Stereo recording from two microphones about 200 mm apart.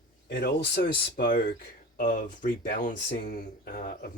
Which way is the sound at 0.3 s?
55° left (ahead or behind).